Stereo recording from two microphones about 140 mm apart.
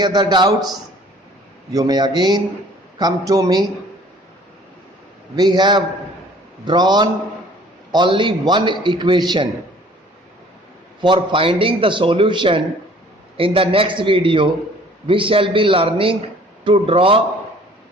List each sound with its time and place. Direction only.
0.0 s a man's voice: 30° right (ahead or behind)
1.7 s a man's voice: 30° right (ahead or behind)
5.4 s a man's voice: 30° right (ahead or behind)
11.0 s a man's voice: 35° right (ahead or behind)